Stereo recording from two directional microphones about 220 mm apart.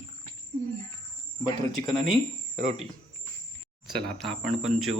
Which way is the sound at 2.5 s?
30° right (ahead or behind).